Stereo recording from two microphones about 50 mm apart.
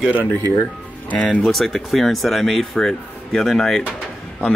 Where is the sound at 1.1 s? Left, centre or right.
Left.